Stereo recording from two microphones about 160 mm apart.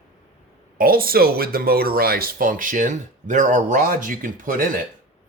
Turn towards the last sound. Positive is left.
turn(degrees=-55)  # may be behind; listen again after turning